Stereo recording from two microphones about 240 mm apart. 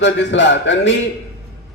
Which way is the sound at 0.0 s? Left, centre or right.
Left.